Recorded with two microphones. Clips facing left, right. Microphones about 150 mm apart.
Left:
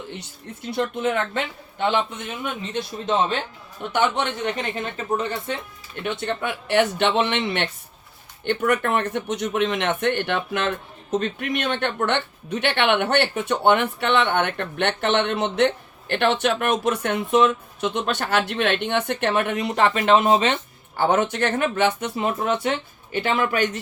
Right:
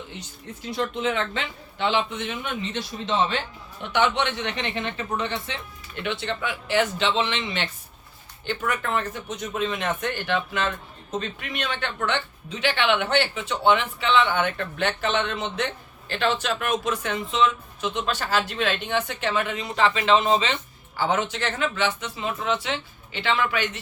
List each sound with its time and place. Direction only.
0.7 s speech: 55° left (ahead or behind)